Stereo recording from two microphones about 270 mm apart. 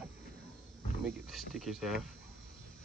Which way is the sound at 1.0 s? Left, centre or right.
Centre.